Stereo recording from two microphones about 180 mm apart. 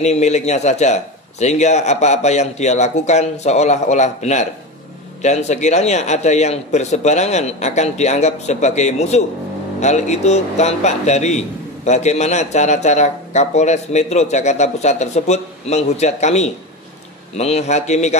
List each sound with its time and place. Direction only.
0.0 s a man's voice: 40° left (ahead or behind)